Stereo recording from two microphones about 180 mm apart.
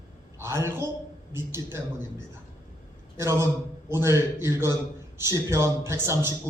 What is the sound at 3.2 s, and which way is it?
A man's voice, 15° right (ahead or behind).